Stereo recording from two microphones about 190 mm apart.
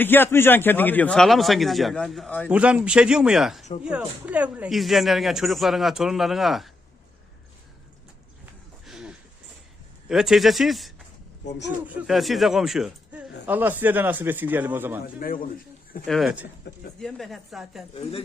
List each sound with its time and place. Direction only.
0.0 s a man's voice: 10° left (ahead or behind)
2.5 s speech: 5° right (ahead or behind)
8.9 s a sound: 5° right (ahead or behind)
10.1 s speech: 5° right (ahead or behind)
15.0 s a man's voice: 50° left (ahead or behind)
16.0 s speech: centre (ahead or behind)